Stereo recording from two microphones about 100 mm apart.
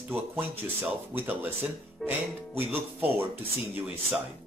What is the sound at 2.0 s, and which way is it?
Speech, 5° left (ahead or behind).